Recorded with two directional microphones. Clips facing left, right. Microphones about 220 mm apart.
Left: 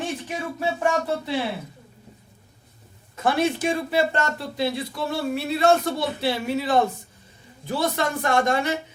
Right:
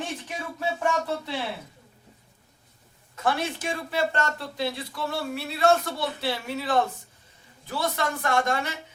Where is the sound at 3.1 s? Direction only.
15° left (ahead or behind).